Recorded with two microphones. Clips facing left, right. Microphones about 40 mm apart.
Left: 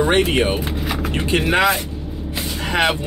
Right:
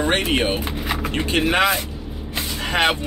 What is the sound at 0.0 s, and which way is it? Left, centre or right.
Speech, centre.